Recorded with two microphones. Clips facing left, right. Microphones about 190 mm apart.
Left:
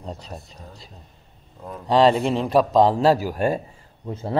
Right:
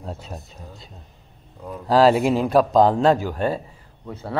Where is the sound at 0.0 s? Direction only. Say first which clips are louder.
Right 1 dB; 5° right (ahead or behind).